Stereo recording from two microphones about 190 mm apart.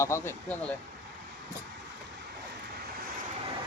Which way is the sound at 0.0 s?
15° left (ahead or behind).